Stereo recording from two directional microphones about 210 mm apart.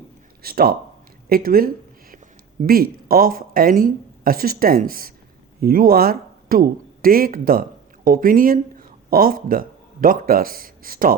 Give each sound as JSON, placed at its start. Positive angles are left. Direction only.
{"t": 0.4, "sound": "speech", "side_deg": -45}